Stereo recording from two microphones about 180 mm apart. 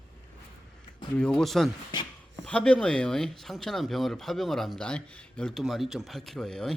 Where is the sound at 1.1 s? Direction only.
5° left (ahead or behind).